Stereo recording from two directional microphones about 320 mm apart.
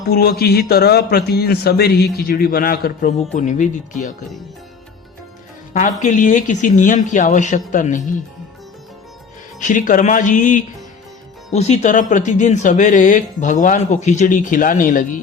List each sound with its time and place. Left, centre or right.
0.1 s a man's voice: left
6.0 s a man's voice: left
9.6 s a man's voice: left